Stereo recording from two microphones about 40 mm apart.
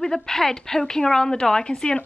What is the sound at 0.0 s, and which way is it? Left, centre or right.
A woman's voice, centre.